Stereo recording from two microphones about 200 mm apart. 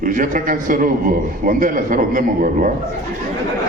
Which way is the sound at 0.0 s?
40° right (ahead or behind).